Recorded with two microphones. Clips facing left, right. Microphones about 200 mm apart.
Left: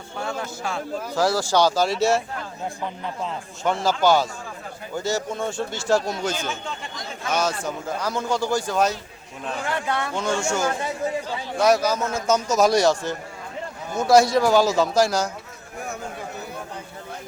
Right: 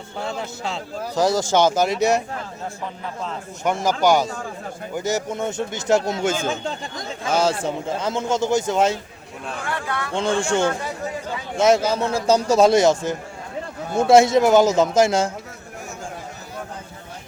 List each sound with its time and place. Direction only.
0.3 s speech: 20° right (ahead or behind)
3.6 s speech: 20° right (ahead or behind)
9.6 s speech: 20° left (ahead or behind)
10.2 s speech: 30° right (ahead or behind)